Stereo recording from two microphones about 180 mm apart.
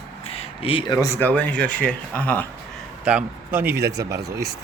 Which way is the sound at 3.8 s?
65° right (ahead or behind).